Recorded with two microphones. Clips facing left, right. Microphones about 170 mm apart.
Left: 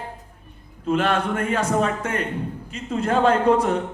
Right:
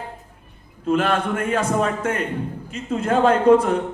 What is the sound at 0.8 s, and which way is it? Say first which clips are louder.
A man's voice: right 1 dB; 50° right (ahead or behind).